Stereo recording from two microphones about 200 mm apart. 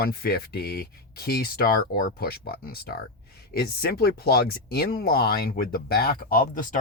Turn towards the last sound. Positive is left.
turn(degrees=45)  # may be behind; listen again after turning